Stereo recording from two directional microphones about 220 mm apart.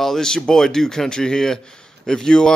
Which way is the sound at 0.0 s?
Centre (ahead or behind).